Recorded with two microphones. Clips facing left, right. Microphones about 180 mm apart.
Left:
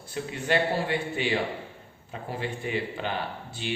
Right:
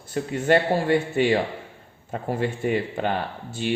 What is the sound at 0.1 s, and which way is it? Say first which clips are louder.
Speech: right 7 dB; 45° right (ahead or behind).